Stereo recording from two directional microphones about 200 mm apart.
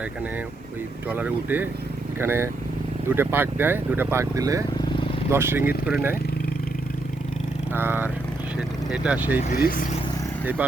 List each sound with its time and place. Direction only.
1.1 s speech: 10° right (ahead or behind)
7.7 s speech: 10° right (ahead or behind)
9.4 s speech: 45° left (ahead or behind)
10.6 s speech: 10° right (ahead or behind)